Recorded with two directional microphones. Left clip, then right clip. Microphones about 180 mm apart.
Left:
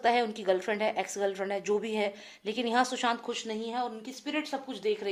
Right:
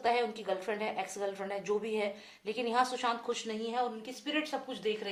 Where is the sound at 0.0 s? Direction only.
50° left (ahead or behind).